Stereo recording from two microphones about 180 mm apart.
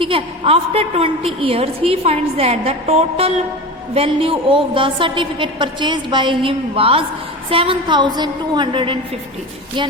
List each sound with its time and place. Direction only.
0.0 s a woman's voice: 30° right (ahead or behind)